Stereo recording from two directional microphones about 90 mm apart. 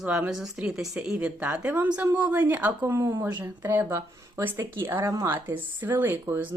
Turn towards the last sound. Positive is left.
turn(degrees=-25)  # may be behind; listen again after turning